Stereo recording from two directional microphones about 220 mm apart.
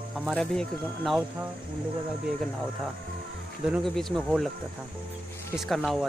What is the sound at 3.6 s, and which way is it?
Speech, centre (ahead or behind).